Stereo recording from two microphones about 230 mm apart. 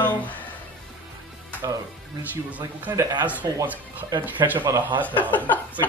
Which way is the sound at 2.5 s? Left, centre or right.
Centre.